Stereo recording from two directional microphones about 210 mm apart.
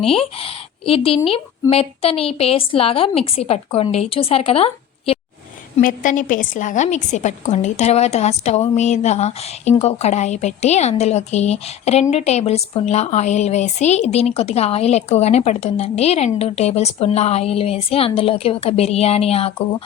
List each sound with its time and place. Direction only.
0.0 s a woman's voice: 25° left (ahead or behind)
5.7 s a woman's voice: 40° left (ahead or behind)